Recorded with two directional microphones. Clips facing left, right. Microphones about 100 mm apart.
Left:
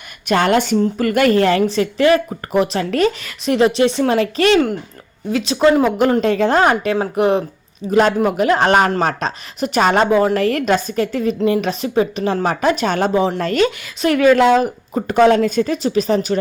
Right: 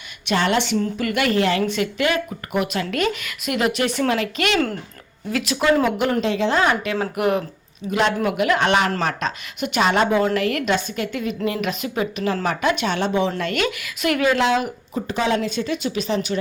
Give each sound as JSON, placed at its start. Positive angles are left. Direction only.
{"t": 0.3, "sound": "a woman's voice", "side_deg": 50}
{"t": 6.2, "sound": "speech", "side_deg": 50}
{"t": 6.9, "sound": "speech", "side_deg": 25}
{"t": 7.9, "sound": "a woman's voice", "side_deg": 45}
{"t": 14.3, "sound": "speech", "side_deg": 45}
{"t": 15.0, "sound": "a woman's voice", "side_deg": 55}